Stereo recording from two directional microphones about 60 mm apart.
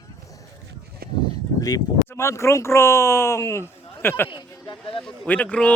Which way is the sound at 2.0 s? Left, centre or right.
Left.